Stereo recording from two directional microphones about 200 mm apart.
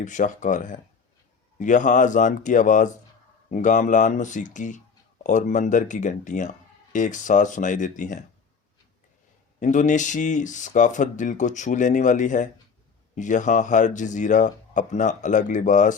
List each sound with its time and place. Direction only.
0.0 s speech: 40° left (ahead or behind)
9.6 s speech: 40° left (ahead or behind)